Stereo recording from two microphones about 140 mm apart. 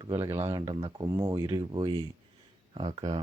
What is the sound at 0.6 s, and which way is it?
Speech, 35° right (ahead or behind).